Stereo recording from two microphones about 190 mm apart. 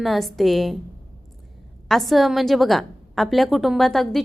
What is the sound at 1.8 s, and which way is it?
A woman's voice, centre (ahead or behind).